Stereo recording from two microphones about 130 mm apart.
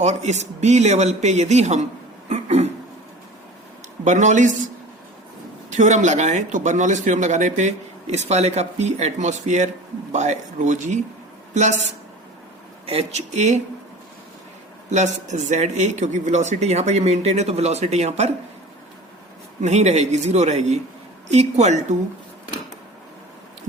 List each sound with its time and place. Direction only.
0.0 s speech: 60° right (ahead or behind)
2.3 s a sound: 55° right (ahead or behind)
4.0 s speech: 70° right (ahead or behind)
5.7 s speech: 70° right (ahead or behind)
12.8 s speech: 50° right (ahead or behind)
14.8 s speech: 65° right (ahead or behind)
19.6 s speech: 60° right (ahead or behind)